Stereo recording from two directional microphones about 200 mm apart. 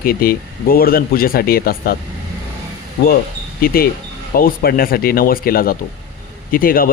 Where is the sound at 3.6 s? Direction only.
45° left (ahead or behind).